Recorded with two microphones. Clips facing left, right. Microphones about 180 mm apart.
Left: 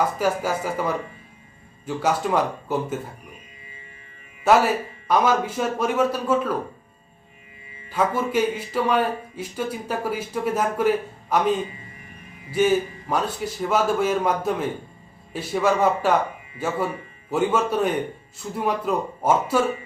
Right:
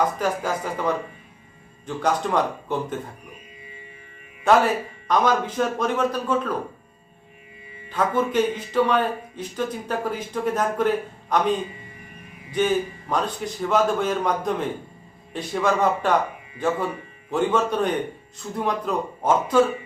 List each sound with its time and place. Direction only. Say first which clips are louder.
0.2 s speech: left 2 dB; 5° left (ahead or behind)
2.0 s speech: even; 5° left (ahead or behind)
4.5 s speech: even; 5° left (ahead or behind)
7.9 s speech: even; 10° left (ahead or behind)
12.5 s speech: left 2 dB; 5° left (ahead or behind)